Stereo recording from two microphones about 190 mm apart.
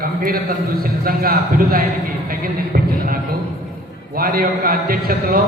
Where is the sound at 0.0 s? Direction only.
50° right (ahead or behind).